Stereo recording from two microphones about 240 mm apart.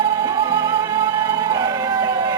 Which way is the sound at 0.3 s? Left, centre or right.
Centre.